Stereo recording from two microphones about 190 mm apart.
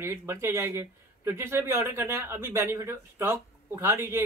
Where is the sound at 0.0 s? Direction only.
15° right (ahead or behind).